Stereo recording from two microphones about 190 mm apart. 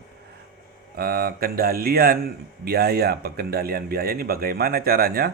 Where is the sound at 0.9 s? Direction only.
55° right (ahead or behind).